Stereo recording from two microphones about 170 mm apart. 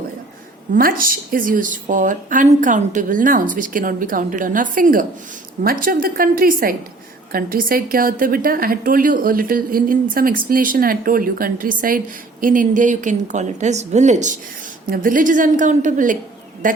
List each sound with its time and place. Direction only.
0.7 s a woman's voice: 55° right (ahead or behind)